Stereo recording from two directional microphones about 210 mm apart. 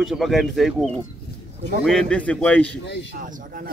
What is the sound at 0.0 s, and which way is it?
A man's voice, centre (ahead or behind).